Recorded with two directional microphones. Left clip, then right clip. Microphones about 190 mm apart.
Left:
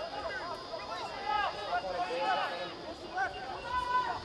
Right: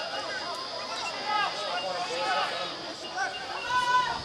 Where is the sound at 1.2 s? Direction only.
25° right (ahead or behind).